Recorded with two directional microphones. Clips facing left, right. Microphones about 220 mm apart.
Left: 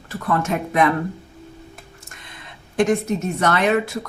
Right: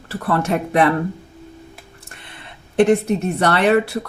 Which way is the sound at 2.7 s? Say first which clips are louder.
Right 4 dB; 35° right (ahead or behind).